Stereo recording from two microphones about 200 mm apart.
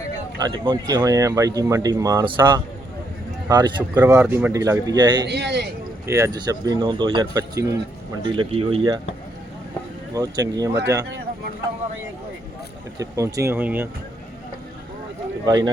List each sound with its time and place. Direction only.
0.3 s speech: 20° right (ahead or behind)
3.5 s speech: 20° right (ahead or behind)
5.2 s a man's voice: 60° right (ahead or behind)
6.1 s speech: 15° right (ahead or behind)
10.2 s speech: 20° right (ahead or behind)
13.0 s speech: 15° right (ahead or behind)
15.4 s speech: 20° right (ahead or behind)